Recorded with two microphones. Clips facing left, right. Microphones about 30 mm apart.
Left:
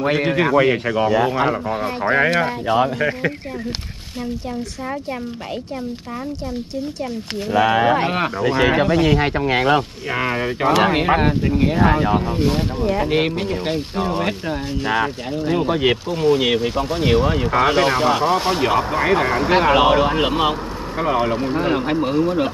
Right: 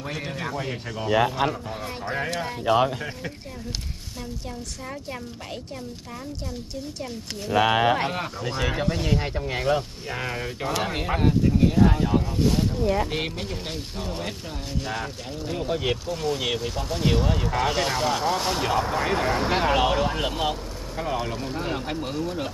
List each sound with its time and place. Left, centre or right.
0.0 s speech: left
1.7 s speech: left
2.0 s speech: left
2.6 s speech: centre
3.0 s speech: left
7.5 s speech: centre
8.1 s speech: left
9.0 s speech: left
10.1 s speech: left